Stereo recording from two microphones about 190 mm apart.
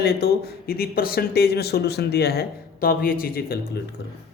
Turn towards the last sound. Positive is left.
turn(degrees=50)  # may be behind; listen again after turning